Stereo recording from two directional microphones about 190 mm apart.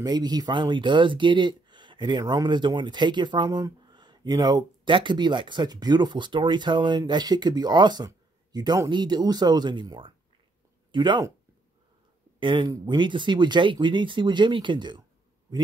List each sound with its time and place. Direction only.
0.0 s speech: 20° right (ahead or behind)
12.4 s speech: 25° right (ahead or behind)